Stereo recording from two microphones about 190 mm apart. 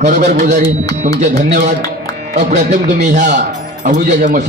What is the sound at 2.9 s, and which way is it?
Speech, 40° right (ahead or behind).